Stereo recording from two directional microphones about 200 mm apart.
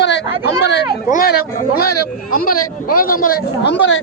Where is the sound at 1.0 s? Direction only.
45° left (ahead or behind).